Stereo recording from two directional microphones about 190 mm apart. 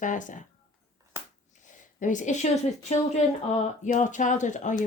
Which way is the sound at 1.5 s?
40° left (ahead or behind).